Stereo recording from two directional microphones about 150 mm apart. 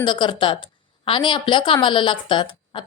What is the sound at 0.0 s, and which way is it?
A woman's voice, 30° left (ahead or behind).